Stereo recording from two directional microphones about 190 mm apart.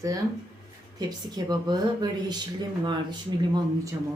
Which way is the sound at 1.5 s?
20° right (ahead or behind).